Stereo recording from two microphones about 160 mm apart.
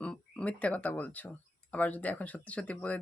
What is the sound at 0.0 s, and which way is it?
Speech, 5° left (ahead or behind).